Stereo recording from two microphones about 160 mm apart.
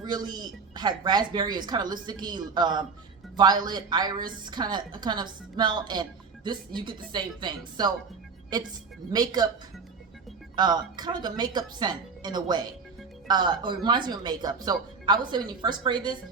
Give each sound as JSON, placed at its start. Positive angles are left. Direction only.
{"t": 0.3, "sound": "a woman's voice", "side_deg": -25}
{"t": 10.5, "sound": "a woman's voice", "side_deg": -25}